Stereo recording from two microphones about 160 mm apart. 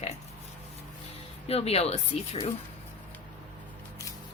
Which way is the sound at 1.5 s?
40° left (ahead or behind).